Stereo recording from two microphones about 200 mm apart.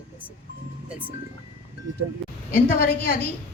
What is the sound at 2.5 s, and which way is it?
Speech, 50° left (ahead or behind).